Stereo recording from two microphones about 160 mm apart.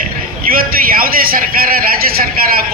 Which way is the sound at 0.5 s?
65° right (ahead or behind).